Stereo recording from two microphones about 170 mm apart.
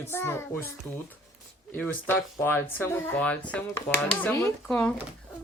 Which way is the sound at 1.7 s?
10° left (ahead or behind).